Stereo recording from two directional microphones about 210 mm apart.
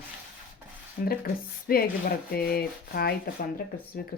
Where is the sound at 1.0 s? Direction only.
45° left (ahead or behind).